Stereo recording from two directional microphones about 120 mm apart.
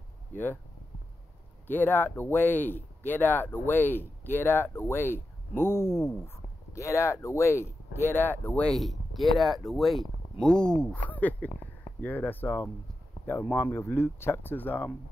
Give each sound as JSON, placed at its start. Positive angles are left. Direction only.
{"t": 1.7, "sound": "speech", "side_deg": 15}
{"t": 8.6, "sound": "speech", "side_deg": 0}